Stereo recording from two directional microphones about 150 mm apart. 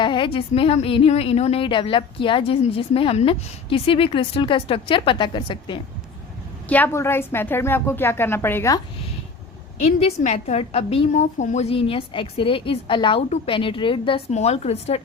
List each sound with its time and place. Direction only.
0.0 s speech: 35° left (ahead or behind)
6.7 s a woman's voice: 10° left (ahead or behind)
10.2 s a woman's voice: 45° left (ahead or behind)